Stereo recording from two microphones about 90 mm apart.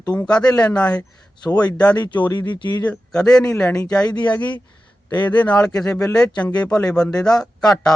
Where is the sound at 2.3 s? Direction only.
55° left (ahead or behind).